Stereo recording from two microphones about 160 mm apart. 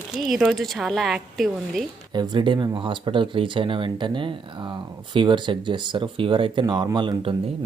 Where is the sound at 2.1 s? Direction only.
30° right (ahead or behind).